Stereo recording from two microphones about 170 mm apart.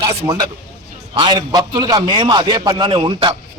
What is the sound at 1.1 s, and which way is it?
Speech, 30° right (ahead or behind).